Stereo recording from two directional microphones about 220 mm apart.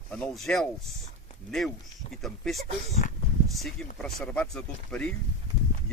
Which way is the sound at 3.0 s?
35° left (ahead or behind).